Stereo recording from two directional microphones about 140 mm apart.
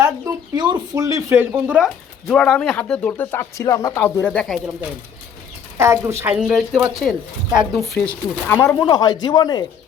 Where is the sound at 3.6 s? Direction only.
25° left (ahead or behind); by 4.7 s centre (ahead or behind).